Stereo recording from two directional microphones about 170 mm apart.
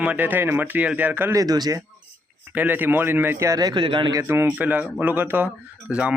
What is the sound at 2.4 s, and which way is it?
Speech, 10° right (ahead or behind).